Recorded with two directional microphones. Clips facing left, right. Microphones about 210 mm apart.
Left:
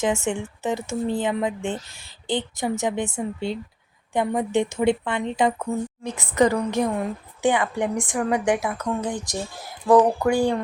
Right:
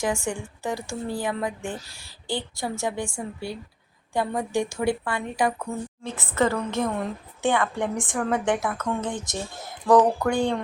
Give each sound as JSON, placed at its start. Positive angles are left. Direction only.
{"t": 0.0, "sound": "a woman's voice", "side_deg": 20}